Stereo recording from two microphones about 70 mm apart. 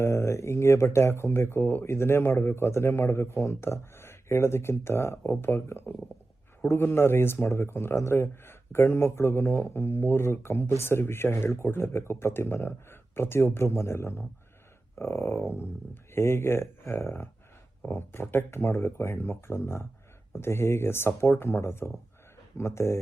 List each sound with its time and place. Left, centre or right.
0.0 s speech: left